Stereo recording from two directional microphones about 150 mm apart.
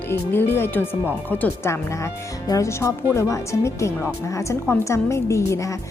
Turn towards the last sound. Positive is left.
turn(degrees=20)  # may be behind; listen again after turning